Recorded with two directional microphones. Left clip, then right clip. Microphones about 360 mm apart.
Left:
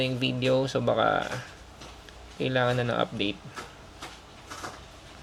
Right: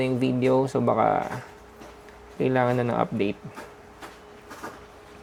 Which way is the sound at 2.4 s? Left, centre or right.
Right.